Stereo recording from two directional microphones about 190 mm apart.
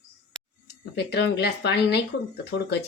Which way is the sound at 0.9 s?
65° left (ahead or behind).